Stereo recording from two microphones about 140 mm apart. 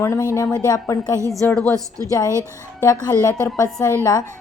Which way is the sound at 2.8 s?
25° left (ahead or behind).